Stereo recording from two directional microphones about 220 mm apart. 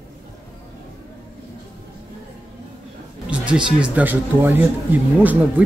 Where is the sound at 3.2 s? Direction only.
5° right (ahead or behind).